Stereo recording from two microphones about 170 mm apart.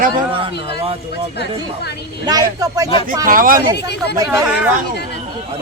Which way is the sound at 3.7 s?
75° left (ahead or behind).